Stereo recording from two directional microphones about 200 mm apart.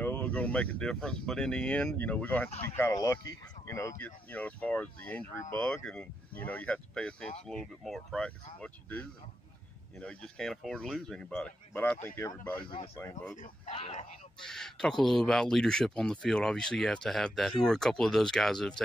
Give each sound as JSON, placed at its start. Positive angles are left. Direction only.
{"t": 0.0, "sound": "speech", "side_deg": 10}
{"t": 13.4, "sound": "speech", "side_deg": 35}
{"t": 14.4, "sound": "speech", "side_deg": 0}